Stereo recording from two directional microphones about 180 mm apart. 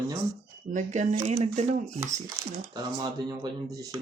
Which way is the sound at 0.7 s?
40° right (ahead or behind).